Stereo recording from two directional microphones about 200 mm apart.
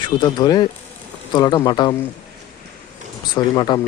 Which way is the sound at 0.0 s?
20° left (ahead or behind).